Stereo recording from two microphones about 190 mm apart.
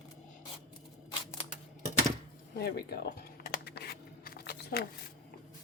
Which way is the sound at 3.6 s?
60° left (ahead or behind).